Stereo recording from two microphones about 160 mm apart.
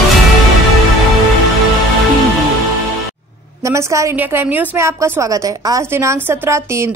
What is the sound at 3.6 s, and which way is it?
A woman's voice, 20° right (ahead or behind).